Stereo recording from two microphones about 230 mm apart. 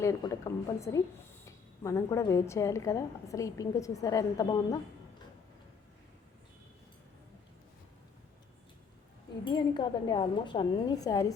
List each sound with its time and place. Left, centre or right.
0.0 s a woman's voice: centre
9.4 s a woman's voice: centre